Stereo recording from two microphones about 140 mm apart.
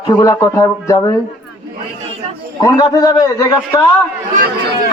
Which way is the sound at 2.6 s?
30° left (ahead or behind).